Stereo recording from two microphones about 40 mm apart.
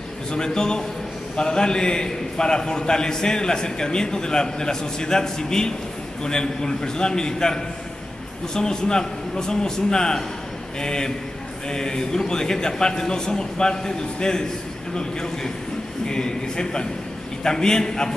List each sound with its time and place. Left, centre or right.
0.3 s a man's voice: centre
16.1 s a man's voice: centre